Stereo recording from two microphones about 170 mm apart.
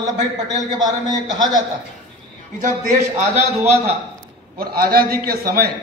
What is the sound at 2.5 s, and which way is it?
Speech, 45° right (ahead or behind).